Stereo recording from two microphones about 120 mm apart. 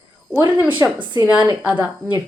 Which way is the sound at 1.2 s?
10° right (ahead or behind).